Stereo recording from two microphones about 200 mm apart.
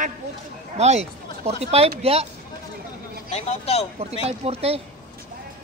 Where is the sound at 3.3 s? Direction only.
30° left (ahead or behind).